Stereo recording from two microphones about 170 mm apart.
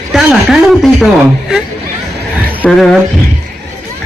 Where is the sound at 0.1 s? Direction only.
Centre (ahead or behind).